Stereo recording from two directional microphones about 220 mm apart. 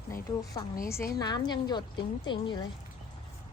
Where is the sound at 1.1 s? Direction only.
20° left (ahead or behind).